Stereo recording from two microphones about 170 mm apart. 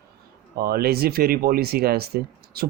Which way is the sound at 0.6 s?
65° right (ahead or behind).